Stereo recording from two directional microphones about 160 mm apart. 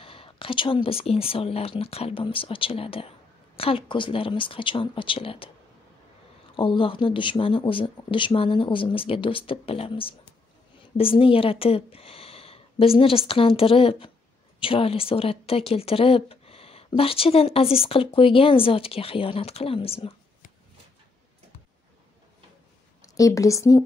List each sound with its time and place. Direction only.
0.0 s speech: 35° left (ahead or behind)
6.5 s speech: 35° left (ahead or behind)
23.0 s a woman's voice: 20° left (ahead or behind)